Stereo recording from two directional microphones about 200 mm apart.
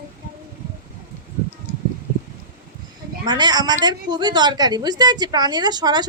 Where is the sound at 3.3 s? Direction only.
20° right (ahead or behind).